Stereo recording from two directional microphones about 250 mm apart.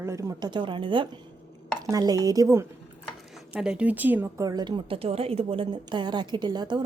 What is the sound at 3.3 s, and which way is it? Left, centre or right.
A woman's voice, centre.